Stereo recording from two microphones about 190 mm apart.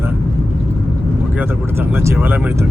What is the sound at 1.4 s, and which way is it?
Speech, 10° right (ahead or behind).